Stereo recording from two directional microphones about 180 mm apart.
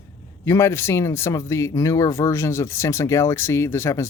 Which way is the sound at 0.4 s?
15° left (ahead or behind).